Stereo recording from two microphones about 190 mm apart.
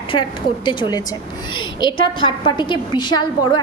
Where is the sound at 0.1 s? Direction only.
25° left (ahead or behind).